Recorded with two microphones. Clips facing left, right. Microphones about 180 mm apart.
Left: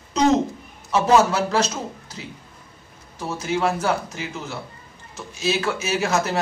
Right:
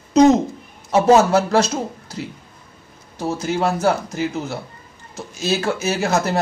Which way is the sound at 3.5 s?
40° right (ahead or behind).